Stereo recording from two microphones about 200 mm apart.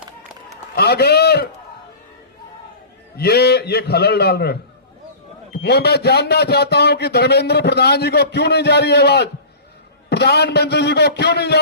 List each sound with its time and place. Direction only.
0.8 s a man's voice: 55° left (ahead or behind)
3.2 s a man's voice: 55° left (ahead or behind)